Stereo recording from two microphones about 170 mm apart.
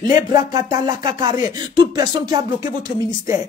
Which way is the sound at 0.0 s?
20° right (ahead or behind).